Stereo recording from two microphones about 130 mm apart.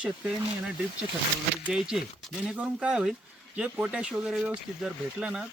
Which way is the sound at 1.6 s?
5° right (ahead or behind).